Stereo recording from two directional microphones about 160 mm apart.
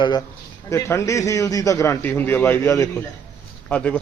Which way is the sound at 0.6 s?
20° left (ahead or behind).